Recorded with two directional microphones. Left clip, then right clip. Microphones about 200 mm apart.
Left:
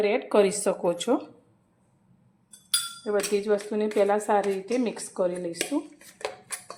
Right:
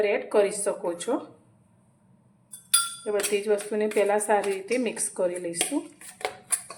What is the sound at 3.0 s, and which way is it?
Speech, 15° left (ahead or behind).